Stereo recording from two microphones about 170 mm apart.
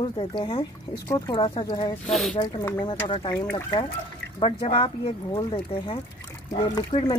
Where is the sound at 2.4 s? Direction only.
25° left (ahead or behind).